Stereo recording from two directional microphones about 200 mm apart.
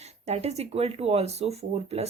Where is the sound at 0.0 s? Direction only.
30° right (ahead or behind).